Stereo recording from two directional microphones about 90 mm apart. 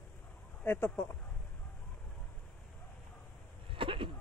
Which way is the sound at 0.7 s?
25° left (ahead or behind).